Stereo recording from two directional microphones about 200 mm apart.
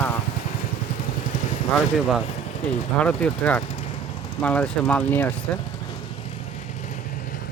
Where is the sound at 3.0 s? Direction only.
5° left (ahead or behind).